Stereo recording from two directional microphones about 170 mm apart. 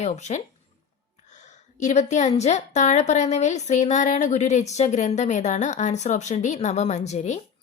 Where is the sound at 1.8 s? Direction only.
45° left (ahead or behind).